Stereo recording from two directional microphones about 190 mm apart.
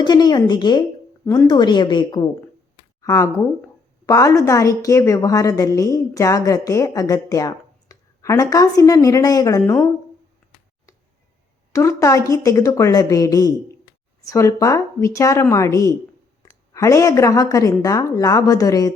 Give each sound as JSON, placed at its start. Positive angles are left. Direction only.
{"t": 0.0, "sound": "a woman's voice", "side_deg": 20}
{"t": 11.7, "sound": "a woman's voice", "side_deg": 15}